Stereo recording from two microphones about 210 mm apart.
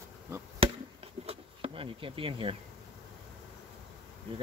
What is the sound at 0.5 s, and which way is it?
Insect, 25° right (ahead or behind).